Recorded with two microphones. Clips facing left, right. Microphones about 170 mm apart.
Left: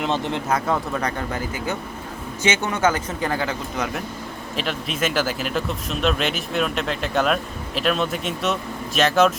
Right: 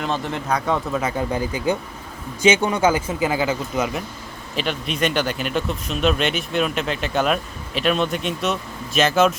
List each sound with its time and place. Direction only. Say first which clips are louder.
0.0 s speech: left 1 dB; 20° left (ahead or behind)
0.4 s speech: right 3 dB; centre (ahead or behind)
1.3 s speech: right 5 dB; 15° right (ahead or behind); by 9.3 s centre (ahead or behind)